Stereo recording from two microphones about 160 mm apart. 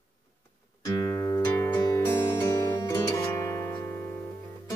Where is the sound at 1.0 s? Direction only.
20° left (ahead or behind).